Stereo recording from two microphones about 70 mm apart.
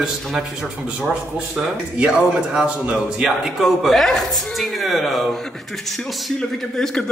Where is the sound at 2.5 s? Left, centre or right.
Centre.